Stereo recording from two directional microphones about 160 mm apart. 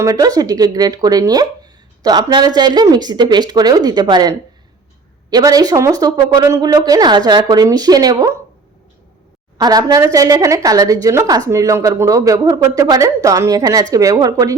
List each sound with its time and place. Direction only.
0.0 s a woman's voice: 20° right (ahead or behind)
9.6 s a woman's voice: 25° right (ahead or behind)